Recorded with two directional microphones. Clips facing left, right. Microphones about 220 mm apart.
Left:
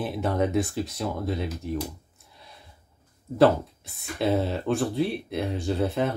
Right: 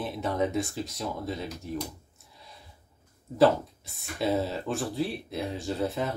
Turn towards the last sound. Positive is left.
turn(degrees=0)  # may be behind; listen again after turning